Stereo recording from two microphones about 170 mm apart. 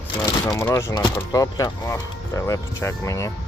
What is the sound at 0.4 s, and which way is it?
Speech, 20° left (ahead or behind).